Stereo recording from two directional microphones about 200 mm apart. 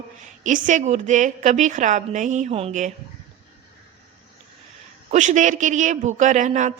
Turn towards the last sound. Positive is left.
turn(degrees=-40)  # may be behind; listen again after turning